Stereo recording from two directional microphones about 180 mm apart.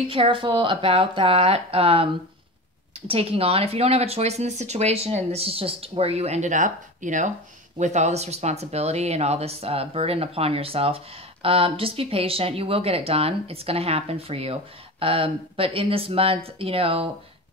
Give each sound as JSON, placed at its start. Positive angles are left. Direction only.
{"t": 0.1, "sound": "speech", "side_deg": -30}
{"t": 3.1, "sound": "speech", "side_deg": -30}